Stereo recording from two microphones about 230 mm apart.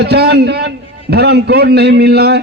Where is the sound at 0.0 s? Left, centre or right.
Right.